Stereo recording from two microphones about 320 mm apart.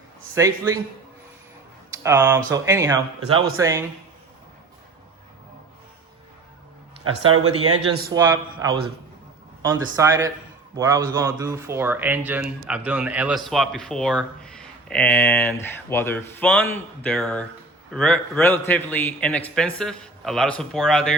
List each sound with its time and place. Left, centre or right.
0.3 s speech: centre
2.0 s speech: centre
7.0 s speech: right
8.1 s speech: centre